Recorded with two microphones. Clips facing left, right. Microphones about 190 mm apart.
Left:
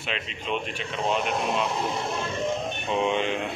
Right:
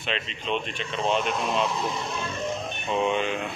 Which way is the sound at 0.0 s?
10° left (ahead or behind).